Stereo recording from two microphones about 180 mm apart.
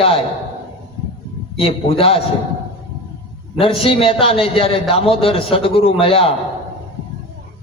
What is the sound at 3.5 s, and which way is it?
A man's voice, 30° left (ahead or behind).